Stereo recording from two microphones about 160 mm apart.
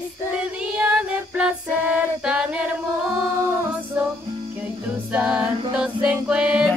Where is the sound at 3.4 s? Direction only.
15° right (ahead or behind).